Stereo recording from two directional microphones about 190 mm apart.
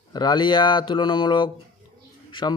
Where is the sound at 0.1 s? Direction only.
20° left (ahead or behind).